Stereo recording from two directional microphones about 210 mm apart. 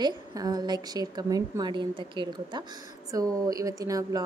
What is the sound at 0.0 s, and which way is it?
A woman's voice, 15° right (ahead or behind).